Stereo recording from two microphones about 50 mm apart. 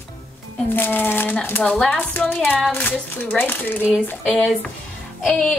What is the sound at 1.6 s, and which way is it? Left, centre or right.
Speech, centre.